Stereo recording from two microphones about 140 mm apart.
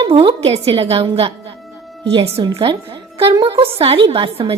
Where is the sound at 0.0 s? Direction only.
40° right (ahead or behind).